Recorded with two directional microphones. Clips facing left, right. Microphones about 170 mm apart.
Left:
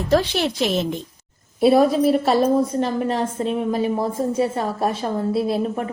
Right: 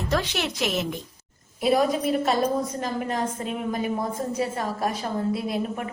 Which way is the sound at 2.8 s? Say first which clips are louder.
Left 5 dB; 30° left (ahead or behind).